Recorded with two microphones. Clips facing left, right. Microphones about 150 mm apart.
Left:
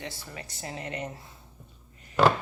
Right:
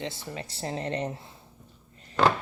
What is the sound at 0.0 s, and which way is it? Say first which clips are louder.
Speech: right 5 dB; 20° right (ahead or behind).